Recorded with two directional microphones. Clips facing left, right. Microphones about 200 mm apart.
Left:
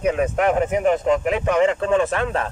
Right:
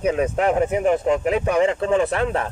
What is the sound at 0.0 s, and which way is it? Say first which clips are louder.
Speech: even; 25° right (ahead or behind).